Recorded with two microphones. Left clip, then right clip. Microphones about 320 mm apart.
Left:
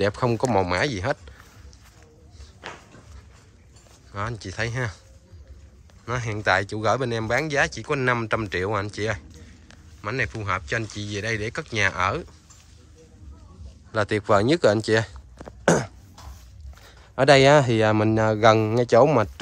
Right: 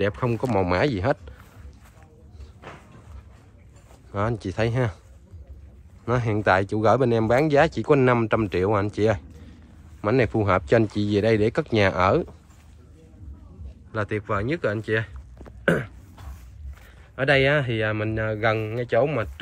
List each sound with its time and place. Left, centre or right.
0.0 s speech: centre
4.1 s speech: centre
6.0 s speech: centre
13.9 s speech: centre
15.6 s a sound: centre
17.1 s speech: centre